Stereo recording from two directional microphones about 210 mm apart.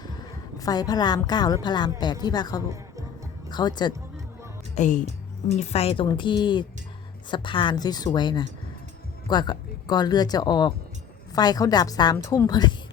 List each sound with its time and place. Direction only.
0.6 s speech: 20° left (ahead or behind)
4.7 s speech: 35° left (ahead or behind); by 12.7 s 20° left (ahead or behind)